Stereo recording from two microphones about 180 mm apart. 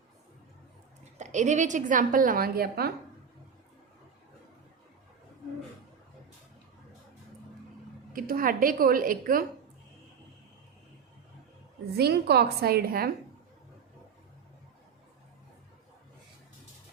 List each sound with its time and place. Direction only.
1.2 s a woman's voice: 40° right (ahead or behind); by 2.9 s 60° right (ahead or behind)
8.1 s a woman's voice: 50° right (ahead or behind)
11.9 s a woman's voice: 65° right (ahead or behind)